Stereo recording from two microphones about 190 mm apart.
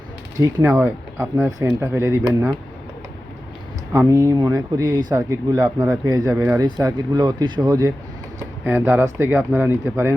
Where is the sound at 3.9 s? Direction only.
15° right (ahead or behind).